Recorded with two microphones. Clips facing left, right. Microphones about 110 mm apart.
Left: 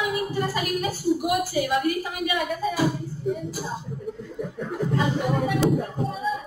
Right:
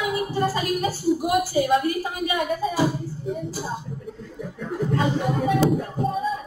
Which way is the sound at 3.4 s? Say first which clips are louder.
Right 1 dB; centre (ahead or behind).